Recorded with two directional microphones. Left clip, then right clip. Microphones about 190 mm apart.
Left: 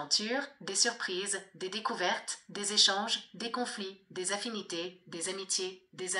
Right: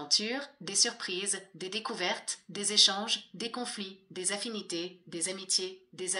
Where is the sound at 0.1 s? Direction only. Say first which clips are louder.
Right 2 dB; 40° right (ahead or behind).